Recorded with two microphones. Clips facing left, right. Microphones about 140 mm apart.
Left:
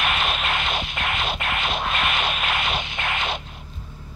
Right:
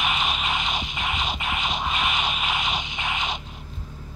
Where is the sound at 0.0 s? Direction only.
65° left (ahead or behind).